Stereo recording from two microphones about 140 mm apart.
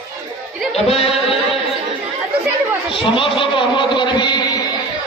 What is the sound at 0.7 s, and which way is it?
Music, 45° left (ahead or behind).